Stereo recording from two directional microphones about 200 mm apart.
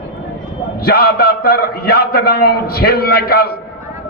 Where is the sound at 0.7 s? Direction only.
50° left (ahead or behind).